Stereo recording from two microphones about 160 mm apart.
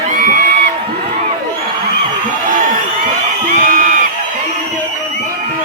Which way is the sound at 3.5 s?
55° right (ahead or behind).